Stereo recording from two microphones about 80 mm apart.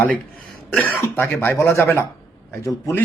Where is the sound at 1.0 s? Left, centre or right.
Left.